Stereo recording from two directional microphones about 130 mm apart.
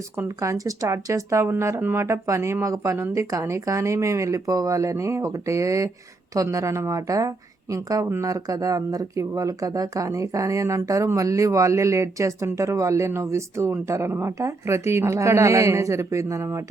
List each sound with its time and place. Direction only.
0.2 s a woman's voice: 20° right (ahead or behind)